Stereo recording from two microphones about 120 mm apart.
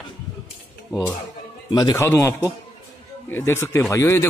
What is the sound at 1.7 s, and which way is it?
Speech, 35° left (ahead or behind).